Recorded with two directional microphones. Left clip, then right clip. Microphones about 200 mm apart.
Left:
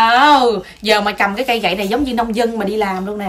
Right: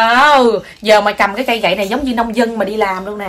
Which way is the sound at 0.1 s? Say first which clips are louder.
Right 2 dB; 30° right (ahead or behind).